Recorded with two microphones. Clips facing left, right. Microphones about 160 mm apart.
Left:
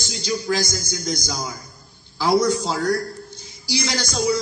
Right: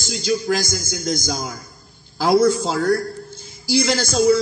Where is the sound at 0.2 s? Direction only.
45° right (ahead or behind).